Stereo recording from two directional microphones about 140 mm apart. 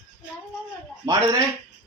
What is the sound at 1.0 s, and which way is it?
Speech, 25° right (ahead or behind).